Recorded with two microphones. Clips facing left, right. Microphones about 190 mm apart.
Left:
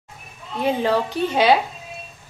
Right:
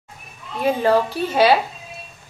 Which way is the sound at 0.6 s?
15° left (ahead or behind).